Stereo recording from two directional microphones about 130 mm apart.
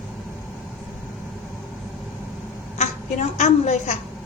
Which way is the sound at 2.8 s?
60° left (ahead or behind).